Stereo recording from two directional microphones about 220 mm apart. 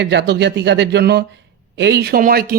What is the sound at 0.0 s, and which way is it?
Speech, 50° right (ahead or behind).